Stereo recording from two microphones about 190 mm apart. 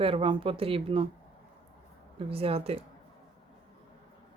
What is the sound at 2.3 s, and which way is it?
Speech, 30° right (ahead or behind).